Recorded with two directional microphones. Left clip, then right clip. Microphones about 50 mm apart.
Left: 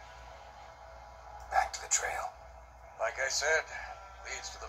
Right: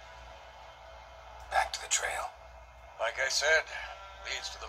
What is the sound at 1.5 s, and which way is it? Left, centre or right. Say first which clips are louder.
Whispering: right 1 dB; left.